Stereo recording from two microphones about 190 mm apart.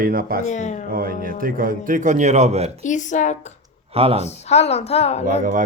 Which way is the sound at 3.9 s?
30° right (ahead or behind).